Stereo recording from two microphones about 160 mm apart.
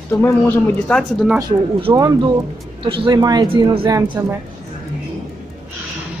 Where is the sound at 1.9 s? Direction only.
20° right (ahead or behind).